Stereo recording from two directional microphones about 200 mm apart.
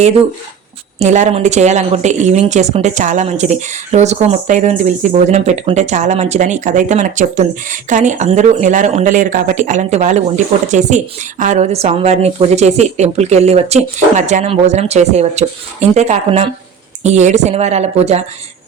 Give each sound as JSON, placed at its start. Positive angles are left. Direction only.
{"t": 0.9, "sound": "speech", "side_deg": -35}